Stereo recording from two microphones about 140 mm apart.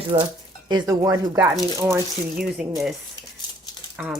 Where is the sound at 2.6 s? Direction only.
5° right (ahead or behind).